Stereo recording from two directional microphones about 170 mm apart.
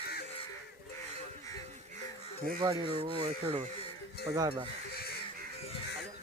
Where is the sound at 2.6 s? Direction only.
35° right (ahead or behind).